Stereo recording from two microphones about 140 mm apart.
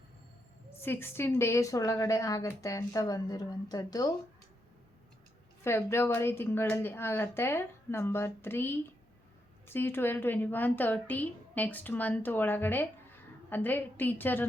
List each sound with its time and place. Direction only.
0.8 s a woman's voice: 15° left (ahead or behind)
5.6 s a woman's voice: 15° left (ahead or behind)